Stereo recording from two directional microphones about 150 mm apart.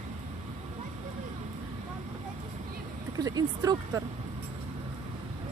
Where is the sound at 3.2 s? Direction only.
25° right (ahead or behind).